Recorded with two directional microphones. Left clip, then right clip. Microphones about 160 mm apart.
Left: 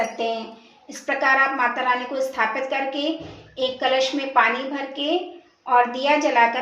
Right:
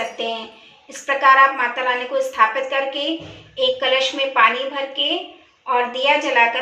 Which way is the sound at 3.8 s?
65° left (ahead or behind).